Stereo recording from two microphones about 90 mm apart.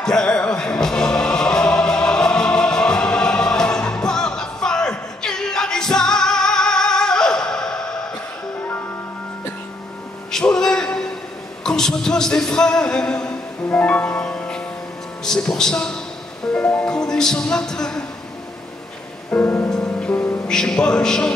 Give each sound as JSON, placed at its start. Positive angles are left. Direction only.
{"t": 0.0, "sound": "music", "side_deg": 10}
{"t": 10.3, "sound": "music", "side_deg": 5}
{"t": 11.6, "sound": "a sound", "side_deg": 5}
{"t": 13.7, "sound": "music", "side_deg": 20}
{"t": 15.2, "sound": "speech", "side_deg": 5}
{"t": 16.5, "sound": "music", "side_deg": 15}
{"t": 19.3, "sound": "music", "side_deg": 25}
{"t": 19.7, "sound": "music", "side_deg": 10}
{"t": 20.1, "sound": "music", "side_deg": 20}
{"t": 20.4, "sound": "music", "side_deg": 5}